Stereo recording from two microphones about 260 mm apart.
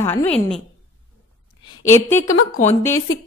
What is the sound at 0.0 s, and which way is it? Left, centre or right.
Speech, centre.